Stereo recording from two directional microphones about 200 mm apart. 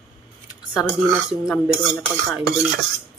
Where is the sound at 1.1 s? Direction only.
Centre (ahead or behind).